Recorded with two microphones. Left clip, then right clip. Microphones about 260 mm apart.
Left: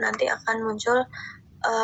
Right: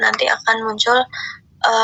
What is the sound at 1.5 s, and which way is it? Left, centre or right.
Throat clearing, right.